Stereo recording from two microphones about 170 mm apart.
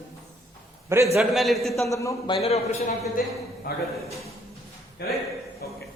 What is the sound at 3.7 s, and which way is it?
Speech, 65° left (ahead or behind).